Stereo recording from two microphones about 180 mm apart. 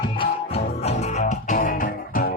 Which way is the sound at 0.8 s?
35° left (ahead or behind).